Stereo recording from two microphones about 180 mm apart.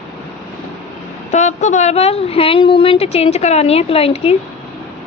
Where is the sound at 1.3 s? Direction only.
40° left (ahead or behind).